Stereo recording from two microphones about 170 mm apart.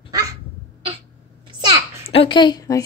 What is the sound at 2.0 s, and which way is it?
Speech, 30° left (ahead or behind).